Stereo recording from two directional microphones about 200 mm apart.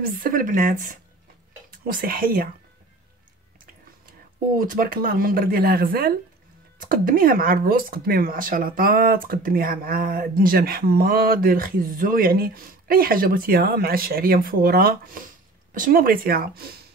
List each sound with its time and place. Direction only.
0.0 s speech: 45° right (ahead or behind)
4.6 s speech: 45° right (ahead or behind)